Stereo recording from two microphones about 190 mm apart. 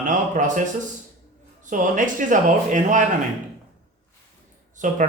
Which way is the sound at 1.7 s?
45° right (ahead or behind).